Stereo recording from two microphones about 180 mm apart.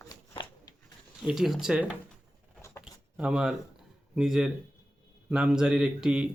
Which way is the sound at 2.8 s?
5° right (ahead or behind).